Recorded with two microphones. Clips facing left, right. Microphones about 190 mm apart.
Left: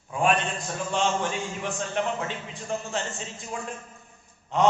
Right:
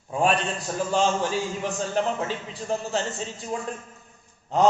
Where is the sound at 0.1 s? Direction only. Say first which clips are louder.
Right 1 dB; 35° right (ahead or behind).